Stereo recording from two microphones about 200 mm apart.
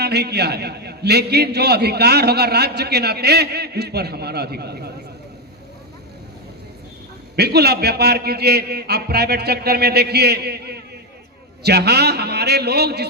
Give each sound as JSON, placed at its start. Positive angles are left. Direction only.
{"t": 0.0, "sound": "a man's voice", "side_deg": -55}
{"t": 7.3, "sound": "a man's voice", "side_deg": -55}